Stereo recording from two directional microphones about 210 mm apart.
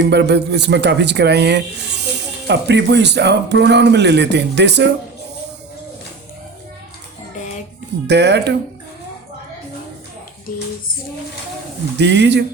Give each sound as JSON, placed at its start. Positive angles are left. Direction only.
{"t": 0.1, "sound": "speech", "side_deg": -55}
{"t": 8.0, "sound": "speech", "side_deg": -55}
{"t": 11.9, "sound": "speech", "side_deg": -55}